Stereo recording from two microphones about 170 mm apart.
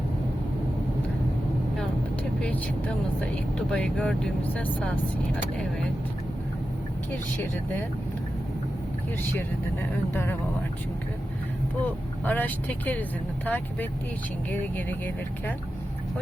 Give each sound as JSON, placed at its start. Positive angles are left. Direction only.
{"t": 3.7, "sound": "speech", "side_deg": 5}
{"t": 10.1, "sound": "speech", "side_deg": 15}
{"t": 11.8, "sound": "speech", "side_deg": 10}